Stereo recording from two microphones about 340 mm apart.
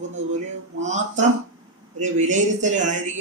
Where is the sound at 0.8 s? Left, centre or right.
Right.